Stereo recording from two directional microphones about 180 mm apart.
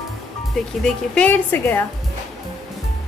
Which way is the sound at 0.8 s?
10° left (ahead or behind).